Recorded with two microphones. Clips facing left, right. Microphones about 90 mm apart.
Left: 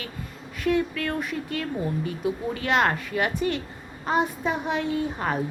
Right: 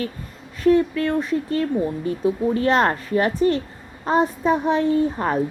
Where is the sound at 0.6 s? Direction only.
35° right (ahead or behind).